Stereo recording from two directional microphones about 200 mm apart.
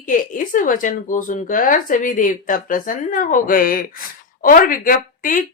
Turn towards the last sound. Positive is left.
turn(degrees=45)  # may be behind; listen again after turning